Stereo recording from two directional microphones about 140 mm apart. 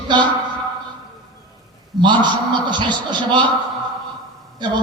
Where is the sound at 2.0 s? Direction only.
35° right (ahead or behind).